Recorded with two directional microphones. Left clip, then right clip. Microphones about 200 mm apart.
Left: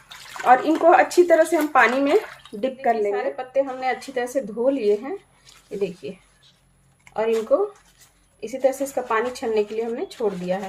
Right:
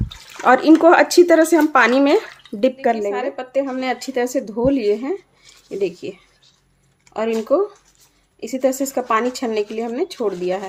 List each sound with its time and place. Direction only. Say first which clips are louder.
0.4 s speech: right 4 dB; 55° right (ahead or behind)
7.5 s speech: right 2 dB; 50° right (ahead or behind)